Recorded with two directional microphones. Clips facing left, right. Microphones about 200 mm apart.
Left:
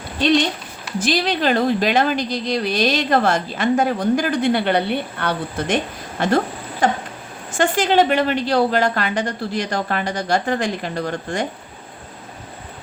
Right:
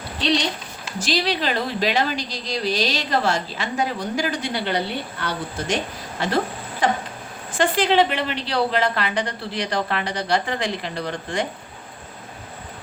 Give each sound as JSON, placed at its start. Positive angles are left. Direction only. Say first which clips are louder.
{"t": 0.9, "sound": "speech", "louder": "left 3 dB", "side_deg": 55}
{"t": 7.6, "sound": "speech", "louder": "left 2 dB", "side_deg": 45}